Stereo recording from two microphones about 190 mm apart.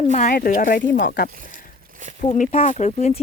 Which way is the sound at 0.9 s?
55° left (ahead or behind).